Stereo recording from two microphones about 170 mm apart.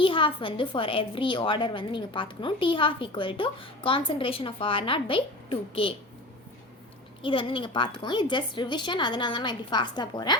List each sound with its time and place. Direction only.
0.0 s a woman's voice: 30° left (ahead or behind)
7.2 s a woman's voice: 30° left (ahead or behind)